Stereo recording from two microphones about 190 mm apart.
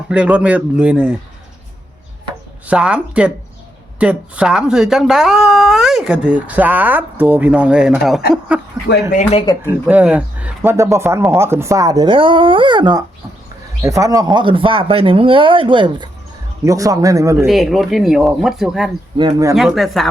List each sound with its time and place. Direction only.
0.1 s speech: 5° right (ahead or behind)
2.6 s speech: 5° right (ahead or behind)
8.9 s speech: 65° left (ahead or behind)
9.6 s speech: 5° right (ahead or behind)
17.4 s speech: centre (ahead or behind)
19.1 s speech: 20° right (ahead or behind)
19.5 s speech: centre (ahead or behind)